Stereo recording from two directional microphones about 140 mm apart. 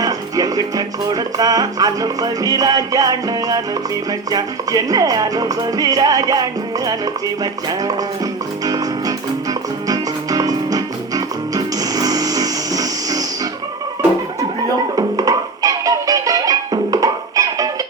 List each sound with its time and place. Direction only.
0.0 s music: 25° right (ahead or behind)
14.9 s music: 25° right (ahead or behind)